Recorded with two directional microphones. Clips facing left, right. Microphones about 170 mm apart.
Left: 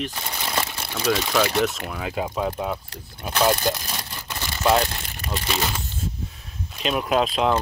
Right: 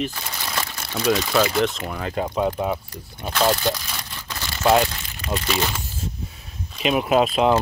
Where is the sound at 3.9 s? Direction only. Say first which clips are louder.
Left 1 dB; 20° left (ahead or behind).